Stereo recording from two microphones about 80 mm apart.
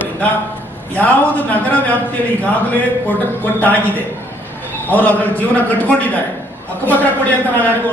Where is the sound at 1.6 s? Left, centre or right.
Left.